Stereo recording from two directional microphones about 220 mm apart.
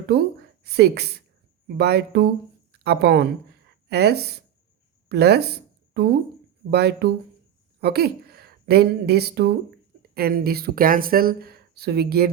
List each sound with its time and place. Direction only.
0.1 s a woman's voice: 50° right (ahead or behind)